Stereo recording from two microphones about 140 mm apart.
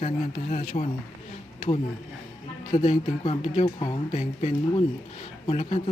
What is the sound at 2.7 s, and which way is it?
Speech, 50° left (ahead or behind).